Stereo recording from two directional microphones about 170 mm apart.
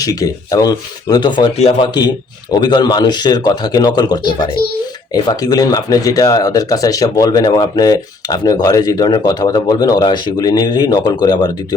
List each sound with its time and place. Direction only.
0.0 s speech: 20° left (ahead or behind)
1.5 s speech: 40° left (ahead or behind)
1.9 s speech: 25° left (ahead or behind)